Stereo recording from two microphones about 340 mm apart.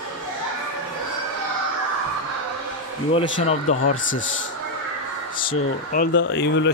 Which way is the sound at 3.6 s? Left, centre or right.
Left.